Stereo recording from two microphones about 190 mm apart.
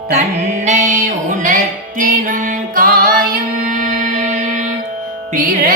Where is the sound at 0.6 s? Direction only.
40° right (ahead or behind).